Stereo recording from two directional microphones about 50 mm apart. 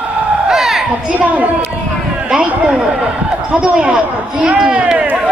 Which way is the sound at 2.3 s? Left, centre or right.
Right.